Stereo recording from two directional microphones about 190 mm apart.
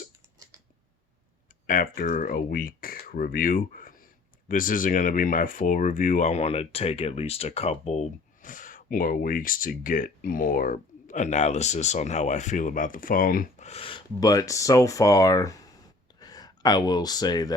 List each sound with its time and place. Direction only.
1.6 s speech: 45° left (ahead or behind); by 17.5 s 20° left (ahead or behind)